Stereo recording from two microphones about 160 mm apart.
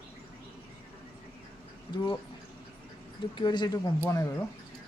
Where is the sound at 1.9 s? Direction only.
30° left (ahead or behind).